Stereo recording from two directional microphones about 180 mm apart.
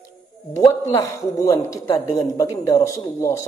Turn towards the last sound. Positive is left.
turn(degrees=15)  # may be behind; listen again after turning